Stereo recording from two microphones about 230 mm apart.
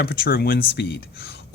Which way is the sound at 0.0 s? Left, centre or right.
Left.